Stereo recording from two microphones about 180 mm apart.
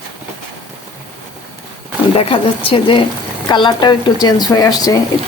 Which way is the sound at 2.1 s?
30° left (ahead or behind).